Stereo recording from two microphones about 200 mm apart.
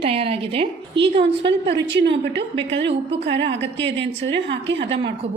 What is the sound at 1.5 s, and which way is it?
Speech, 60° right (ahead or behind).